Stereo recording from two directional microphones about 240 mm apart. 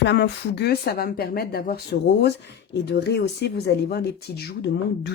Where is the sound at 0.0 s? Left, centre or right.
Left.